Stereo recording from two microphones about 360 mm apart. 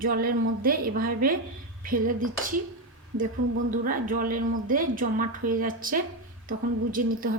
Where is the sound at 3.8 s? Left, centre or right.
Right.